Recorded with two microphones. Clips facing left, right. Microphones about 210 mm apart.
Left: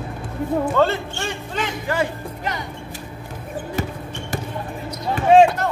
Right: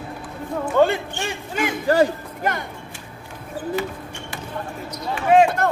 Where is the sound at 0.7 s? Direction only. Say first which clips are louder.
Right 1 dB; 15° right (ahead or behind).